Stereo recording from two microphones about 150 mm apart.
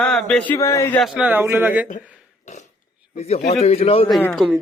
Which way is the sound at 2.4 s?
50° left (ahead or behind).